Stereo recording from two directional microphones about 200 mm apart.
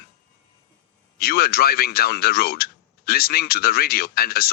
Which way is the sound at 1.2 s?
50° left (ahead or behind).